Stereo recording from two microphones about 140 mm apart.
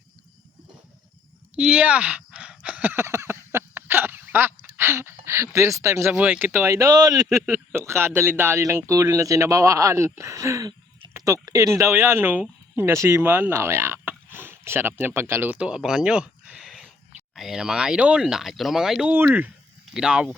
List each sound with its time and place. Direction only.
1.5 s a sound: 10° right (ahead or behind); by 7.1 s 25° right (ahead or behind)
7.4 s speech: 15° right (ahead or behind)
19.1 s speech: 15° right (ahead or behind)